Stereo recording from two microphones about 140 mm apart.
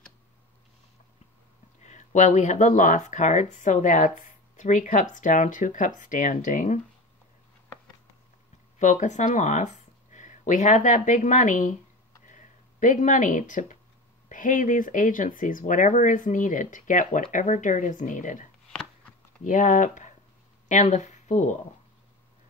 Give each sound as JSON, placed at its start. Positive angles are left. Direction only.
{"t": 1.8, "sound": "speech", "side_deg": 60}
{"t": 8.7, "sound": "speech", "side_deg": 60}